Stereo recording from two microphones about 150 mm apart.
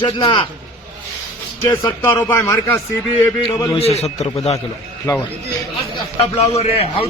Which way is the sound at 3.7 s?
45° left (ahead or behind).